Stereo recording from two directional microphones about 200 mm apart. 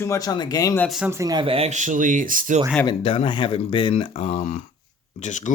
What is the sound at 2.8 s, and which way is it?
Speech, 25° left (ahead or behind).